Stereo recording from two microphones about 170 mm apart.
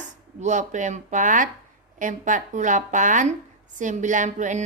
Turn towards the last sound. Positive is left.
turn(degrees=-45)  # may be behind; listen again after turning